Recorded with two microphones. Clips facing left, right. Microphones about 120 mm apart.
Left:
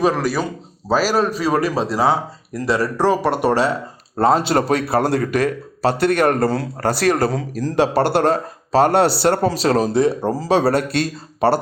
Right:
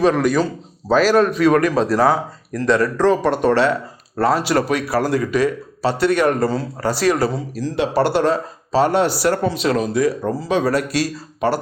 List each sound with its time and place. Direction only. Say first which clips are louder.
0.0 s a man's voice: right 3 dB; 5° left (ahead or behind)
1.5 s a man's voice: right 4 dB; 30° left (ahead or behind)
2.5 s speech: right 3 dB; 10° left (ahead or behind)
4.2 s a man's voice: left 1 dB; 25° left (ahead or behind)
5.2 s speech: right 1 dB; 50° left (ahead or behind)
9.0 s speech: left 2 dB; 30° left (ahead or behind)